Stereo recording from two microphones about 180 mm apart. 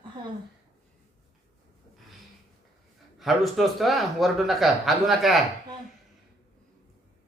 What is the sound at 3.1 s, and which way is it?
A man's voice, centre (ahead or behind).